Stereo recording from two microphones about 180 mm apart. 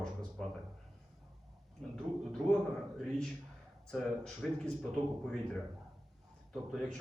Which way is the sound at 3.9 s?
5° left (ahead or behind).